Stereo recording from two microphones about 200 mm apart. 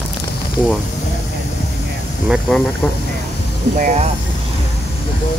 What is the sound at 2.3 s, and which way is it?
Speech, centre (ahead or behind).